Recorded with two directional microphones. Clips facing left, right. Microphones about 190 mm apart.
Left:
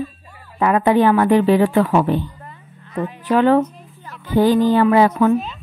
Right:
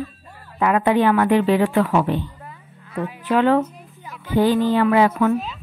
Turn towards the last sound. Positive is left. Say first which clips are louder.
# left 3 dB
turn(degrees=35)  # may be behind; listen again after turning